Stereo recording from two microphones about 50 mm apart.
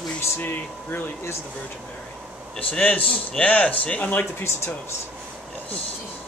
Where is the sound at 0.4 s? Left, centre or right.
Left.